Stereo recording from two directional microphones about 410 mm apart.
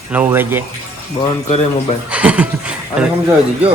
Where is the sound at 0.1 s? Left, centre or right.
Centre.